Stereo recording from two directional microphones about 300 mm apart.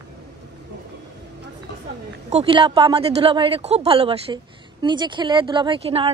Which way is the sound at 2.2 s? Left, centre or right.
Centre.